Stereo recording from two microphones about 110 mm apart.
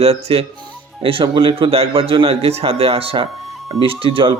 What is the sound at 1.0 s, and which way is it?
A man's voice, 50° right (ahead or behind).